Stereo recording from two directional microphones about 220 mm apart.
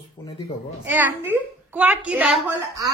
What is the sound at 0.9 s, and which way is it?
Speech, 10° right (ahead or behind).